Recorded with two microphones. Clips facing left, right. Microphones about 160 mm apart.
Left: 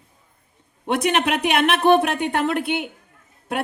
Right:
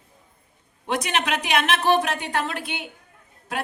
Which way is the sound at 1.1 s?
55° left (ahead or behind).